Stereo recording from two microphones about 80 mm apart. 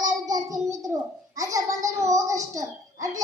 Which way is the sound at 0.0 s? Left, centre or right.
Right.